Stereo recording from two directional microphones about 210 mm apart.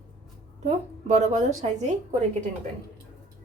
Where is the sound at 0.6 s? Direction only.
35° right (ahead or behind).